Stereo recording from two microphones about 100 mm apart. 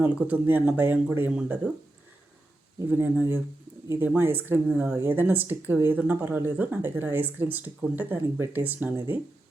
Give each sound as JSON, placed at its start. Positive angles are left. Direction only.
{"t": 0.0, "sound": "speech", "side_deg": -15}
{"t": 2.9, "sound": "speech", "side_deg": -20}